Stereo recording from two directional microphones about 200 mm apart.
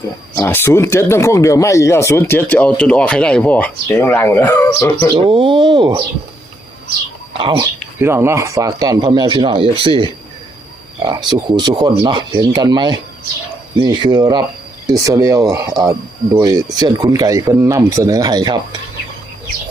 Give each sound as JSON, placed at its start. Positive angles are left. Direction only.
{"t": 0.3, "sound": "speech", "side_deg": 10}
{"t": 5.1, "sound": "speech", "side_deg": -25}
{"t": 7.3, "sound": "speech", "side_deg": -25}
{"t": 7.9, "sound": "speech", "side_deg": -10}